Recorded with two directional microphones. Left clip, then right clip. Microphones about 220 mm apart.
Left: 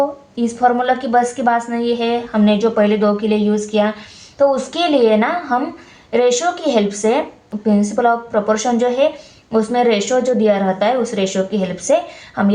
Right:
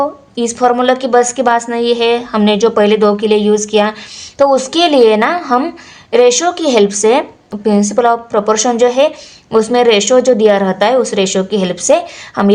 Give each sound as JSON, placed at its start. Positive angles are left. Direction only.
{"t": 0.0, "sound": "a woman's voice", "side_deg": -45}